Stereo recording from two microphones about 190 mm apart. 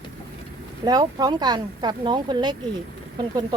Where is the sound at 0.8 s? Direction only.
20° right (ahead or behind).